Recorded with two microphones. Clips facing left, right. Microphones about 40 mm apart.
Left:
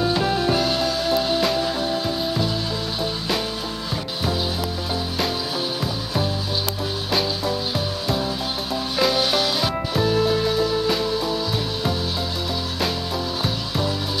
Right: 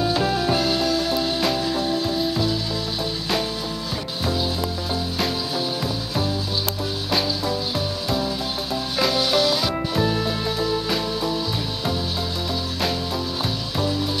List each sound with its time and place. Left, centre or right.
0.0 s music: centre
7.1 s music: centre
9.9 s music: centre